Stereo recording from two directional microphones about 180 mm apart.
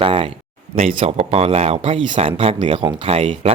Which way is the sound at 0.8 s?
35° right (ahead or behind).